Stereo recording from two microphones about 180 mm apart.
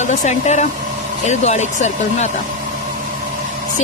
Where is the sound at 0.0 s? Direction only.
40° left (ahead or behind).